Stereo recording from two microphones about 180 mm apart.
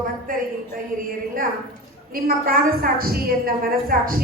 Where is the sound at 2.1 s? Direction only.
55° right (ahead or behind).